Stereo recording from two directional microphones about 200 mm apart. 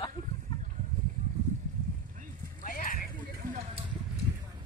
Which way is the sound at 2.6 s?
40° left (ahead or behind).